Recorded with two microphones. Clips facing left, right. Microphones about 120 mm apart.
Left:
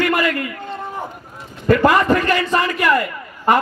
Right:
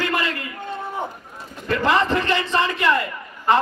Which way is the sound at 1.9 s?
25° right (ahead or behind).